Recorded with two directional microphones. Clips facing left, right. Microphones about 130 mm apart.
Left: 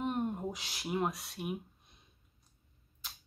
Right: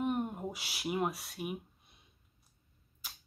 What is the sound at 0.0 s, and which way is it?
Speech, 5° right (ahead or behind).